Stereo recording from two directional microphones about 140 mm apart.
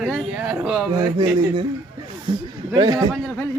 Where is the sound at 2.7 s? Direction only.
25° right (ahead or behind).